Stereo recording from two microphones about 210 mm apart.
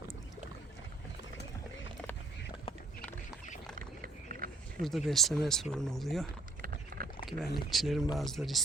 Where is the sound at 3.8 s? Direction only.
45° right (ahead or behind).